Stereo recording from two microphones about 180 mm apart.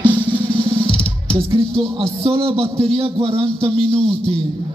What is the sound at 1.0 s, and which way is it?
Music, 30° right (ahead or behind).